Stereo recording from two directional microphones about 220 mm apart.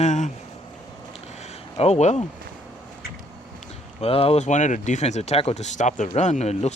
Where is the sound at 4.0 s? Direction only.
25° left (ahead or behind).